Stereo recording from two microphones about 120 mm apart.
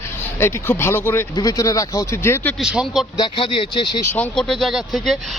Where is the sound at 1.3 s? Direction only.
30° left (ahead or behind).